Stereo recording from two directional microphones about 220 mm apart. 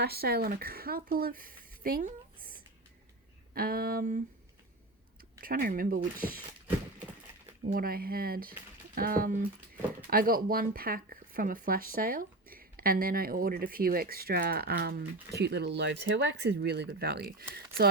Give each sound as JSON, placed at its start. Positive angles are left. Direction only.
{"t": 0.0, "sound": "speech", "side_deg": -45}
{"t": 5.4, "sound": "speech", "side_deg": -40}
{"t": 7.7, "sound": "speech", "side_deg": -40}